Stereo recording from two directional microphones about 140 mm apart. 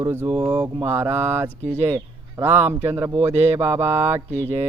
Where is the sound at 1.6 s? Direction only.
50° right (ahead or behind).